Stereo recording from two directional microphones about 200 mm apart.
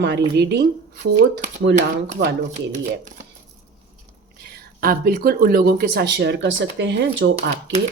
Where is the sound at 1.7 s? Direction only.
50° right (ahead or behind).